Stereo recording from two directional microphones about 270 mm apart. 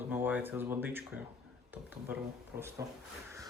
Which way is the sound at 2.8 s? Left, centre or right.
Centre.